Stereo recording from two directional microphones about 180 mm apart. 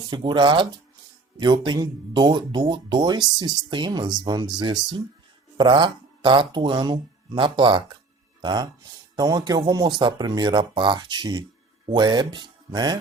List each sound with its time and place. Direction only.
0.1 s speech: 25° right (ahead or behind)